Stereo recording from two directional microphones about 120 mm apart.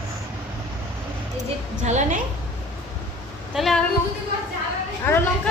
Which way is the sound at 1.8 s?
75° right (ahead or behind).